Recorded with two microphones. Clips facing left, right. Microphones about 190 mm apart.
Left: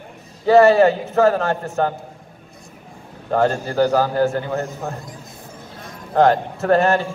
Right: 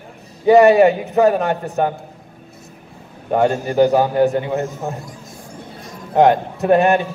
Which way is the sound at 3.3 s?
15° right (ahead or behind).